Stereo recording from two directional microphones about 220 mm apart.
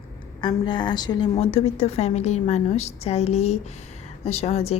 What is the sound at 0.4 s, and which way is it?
A woman's voice, 20° left (ahead or behind).